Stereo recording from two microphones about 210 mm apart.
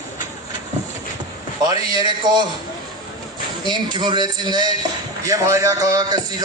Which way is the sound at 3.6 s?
20° right (ahead or behind).